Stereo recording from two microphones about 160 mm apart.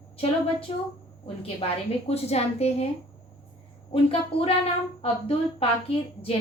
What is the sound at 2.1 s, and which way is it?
Speech, 40° left (ahead or behind).